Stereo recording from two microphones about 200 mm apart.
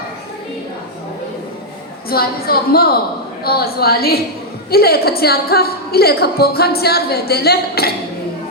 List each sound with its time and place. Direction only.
2.0 s a woman's voice: 50° left (ahead or behind)